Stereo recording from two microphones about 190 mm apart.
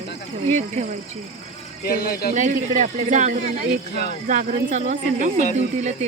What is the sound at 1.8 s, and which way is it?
Speech, 50° left (ahead or behind).